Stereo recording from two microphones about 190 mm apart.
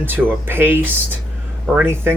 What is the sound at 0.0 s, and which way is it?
Speech, 10° right (ahead or behind).